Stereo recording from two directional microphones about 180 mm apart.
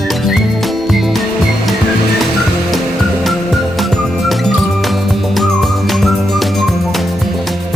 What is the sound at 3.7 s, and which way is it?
Music, centre (ahead or behind).